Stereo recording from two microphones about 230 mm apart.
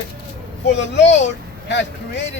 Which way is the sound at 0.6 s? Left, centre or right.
Left.